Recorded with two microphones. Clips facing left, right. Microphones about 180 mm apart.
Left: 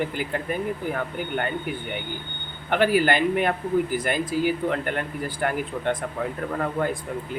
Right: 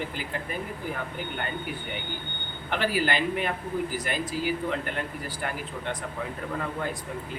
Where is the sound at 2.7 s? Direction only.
55° left (ahead or behind).